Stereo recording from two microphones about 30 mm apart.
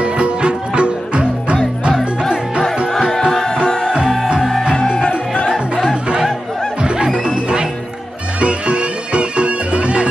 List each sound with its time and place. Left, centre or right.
0.0 s music: right
3.3 s music: centre
3.6 s music: left
6.8 s music: right